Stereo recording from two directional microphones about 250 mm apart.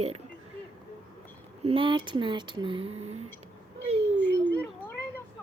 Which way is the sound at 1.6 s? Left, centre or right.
Right.